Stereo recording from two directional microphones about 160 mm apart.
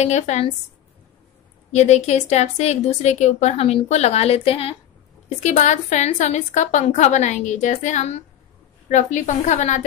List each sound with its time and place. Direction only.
0.0 s a woman's voice: 45° left (ahead or behind)
1.7 s a woman's voice: 45° left (ahead or behind)